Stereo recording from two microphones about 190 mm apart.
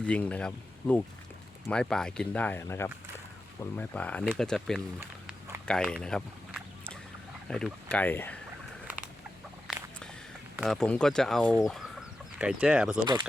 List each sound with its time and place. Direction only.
0.0 s speech: 5° left (ahead or behind)
4.9 s a sound: 15° right (ahead or behind)
5.6 s speech: 5° left (ahead or behind)
10.6 s speech: centre (ahead or behind)
11.7 s chicken: centre (ahead or behind)